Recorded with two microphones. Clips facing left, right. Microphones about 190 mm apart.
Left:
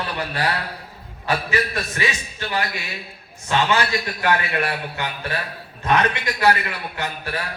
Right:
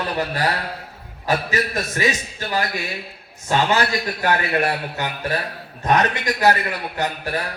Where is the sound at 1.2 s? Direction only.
40° right (ahead or behind).